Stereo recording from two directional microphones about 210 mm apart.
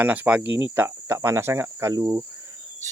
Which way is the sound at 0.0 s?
5° right (ahead or behind).